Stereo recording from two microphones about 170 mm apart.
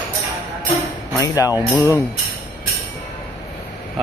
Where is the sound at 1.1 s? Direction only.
20° left (ahead or behind).